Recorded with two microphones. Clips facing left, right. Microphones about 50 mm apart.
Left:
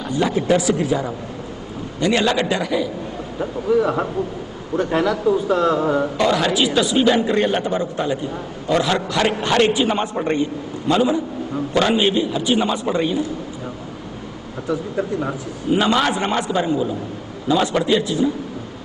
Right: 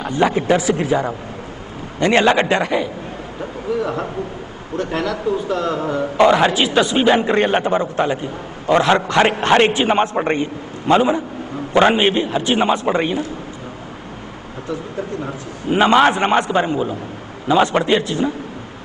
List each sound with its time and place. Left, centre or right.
0.0 s a man's voice: right
3.3 s a man's voice: centre
6.1 s a man's voice: right
14.7 s speech: centre
15.7 s a man's voice: right